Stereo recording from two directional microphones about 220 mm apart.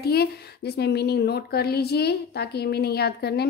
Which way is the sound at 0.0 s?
45° left (ahead or behind).